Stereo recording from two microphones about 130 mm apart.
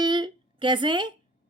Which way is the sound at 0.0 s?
35° right (ahead or behind).